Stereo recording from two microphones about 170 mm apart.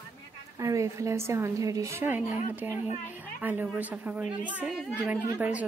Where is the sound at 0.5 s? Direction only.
20° right (ahead or behind).